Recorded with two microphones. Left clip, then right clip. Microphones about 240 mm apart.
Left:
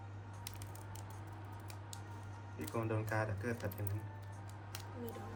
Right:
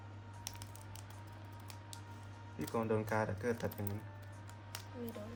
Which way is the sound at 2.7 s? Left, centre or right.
Right.